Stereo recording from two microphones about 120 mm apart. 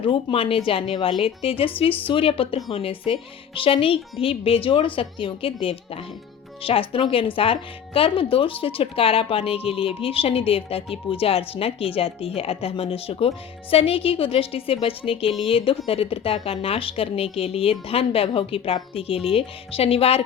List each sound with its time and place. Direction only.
0.0 s a woman's voice: 50° left (ahead or behind)